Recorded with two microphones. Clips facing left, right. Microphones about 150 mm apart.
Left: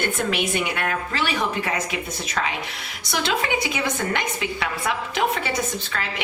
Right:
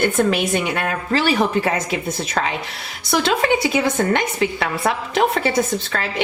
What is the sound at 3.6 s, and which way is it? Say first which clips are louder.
A woman's voice: right 7 dB; 35° right (ahead or behind).